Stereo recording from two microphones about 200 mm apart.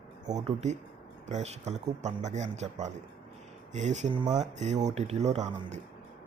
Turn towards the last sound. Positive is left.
turn(degrees=-35)  # may be behind; listen again after turning